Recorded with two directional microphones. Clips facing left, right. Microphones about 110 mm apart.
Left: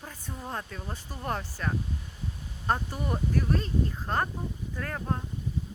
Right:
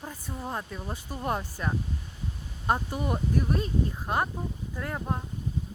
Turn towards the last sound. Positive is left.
turn(degrees=-15)  # may be behind; listen again after turning